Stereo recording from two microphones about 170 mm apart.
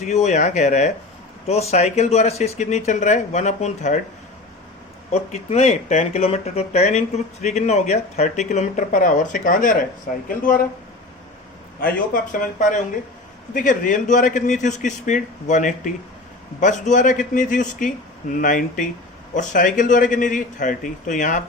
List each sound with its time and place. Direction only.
0.0 s a man's voice: 40° left (ahead or behind)
5.1 s a man's voice: 40° left (ahead or behind)
11.8 s a man's voice: 55° left (ahead or behind)